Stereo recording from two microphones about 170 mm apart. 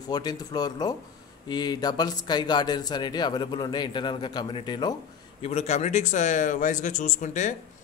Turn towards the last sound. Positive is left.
turn(degrees=45)  # may be behind; listen again after turning